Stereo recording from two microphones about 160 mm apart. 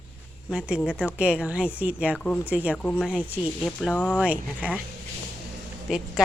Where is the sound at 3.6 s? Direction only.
5° left (ahead or behind).